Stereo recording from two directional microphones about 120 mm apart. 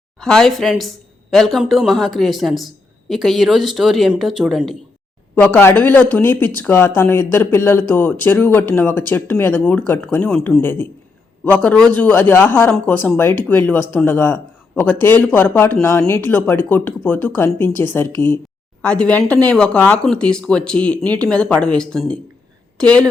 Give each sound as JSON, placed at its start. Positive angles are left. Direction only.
{"t": 0.2, "sound": "speech", "side_deg": 0}
{"t": 5.3, "sound": "speech", "side_deg": 15}